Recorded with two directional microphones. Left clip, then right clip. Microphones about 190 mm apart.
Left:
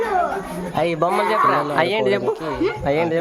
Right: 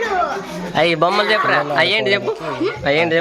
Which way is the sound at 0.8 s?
Centre (ahead or behind).